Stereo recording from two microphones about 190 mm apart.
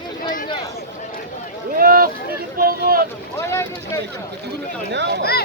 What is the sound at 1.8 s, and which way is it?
Speech, 50° right (ahead or behind).